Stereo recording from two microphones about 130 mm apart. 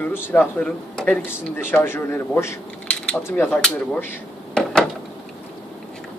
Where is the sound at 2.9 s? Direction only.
10° left (ahead or behind).